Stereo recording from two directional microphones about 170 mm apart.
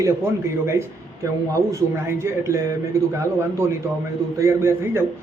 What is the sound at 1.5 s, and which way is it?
Speech, 15° right (ahead or behind).